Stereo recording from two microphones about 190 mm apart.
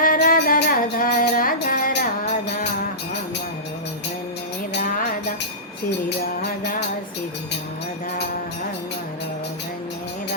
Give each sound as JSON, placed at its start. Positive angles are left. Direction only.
{"t": 0.0, "sound": "music", "side_deg": 50}
{"t": 6.1, "sound": "music", "side_deg": 55}